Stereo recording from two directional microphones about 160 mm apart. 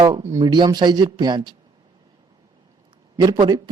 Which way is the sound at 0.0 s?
20° right (ahead or behind).